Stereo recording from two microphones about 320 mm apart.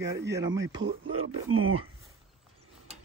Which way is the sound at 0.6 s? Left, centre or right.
Centre.